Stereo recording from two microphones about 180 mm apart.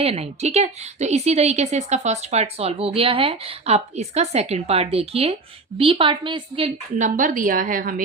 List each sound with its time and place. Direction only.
0.0 s a woman's voice: 35° right (ahead or behind)
7.0 s a woman's voice: 45° right (ahead or behind)